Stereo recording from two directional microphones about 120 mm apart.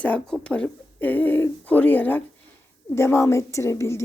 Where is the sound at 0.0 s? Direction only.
10° left (ahead or behind).